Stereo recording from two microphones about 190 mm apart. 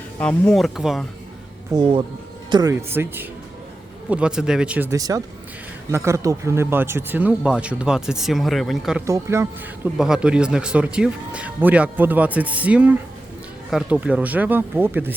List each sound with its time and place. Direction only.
0.2 s speech: 5° left (ahead or behind)
1.7 s speech: 25° right (ahead or behind); by 9.0 s centre (ahead or behind)
9.0 s speech: 15° right (ahead or behind)